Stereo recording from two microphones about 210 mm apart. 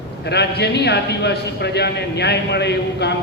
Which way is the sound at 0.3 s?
55° left (ahead or behind).